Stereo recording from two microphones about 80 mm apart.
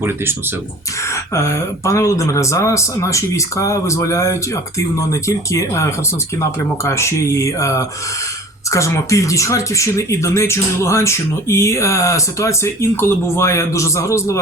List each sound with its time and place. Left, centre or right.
0.0 s speech: right
1.0 s speech: left